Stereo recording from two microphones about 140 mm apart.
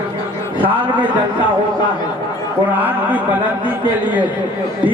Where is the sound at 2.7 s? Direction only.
10° right (ahead or behind).